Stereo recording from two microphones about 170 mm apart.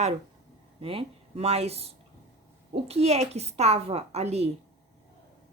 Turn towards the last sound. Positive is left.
turn(degrees=-40)  # may be behind; listen again after turning